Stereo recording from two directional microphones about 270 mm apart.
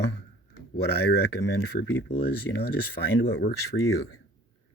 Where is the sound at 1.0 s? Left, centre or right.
Left.